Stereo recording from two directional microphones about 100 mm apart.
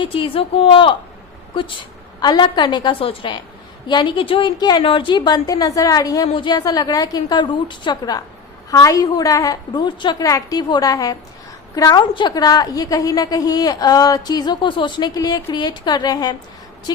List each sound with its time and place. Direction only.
0.0 s a woman's voice: 65° left (ahead or behind); by 4.8 s 45° left (ahead or behind)
4.8 s a woman's voice: 60° left (ahead or behind); by 6.2 s 35° left (ahead or behind)
6.3 s a woman's voice: 45° left (ahead or behind)
8.7 s a woman's voice: 35° left (ahead or behind)
10.2 s a woman's voice: 35° left (ahead or behind)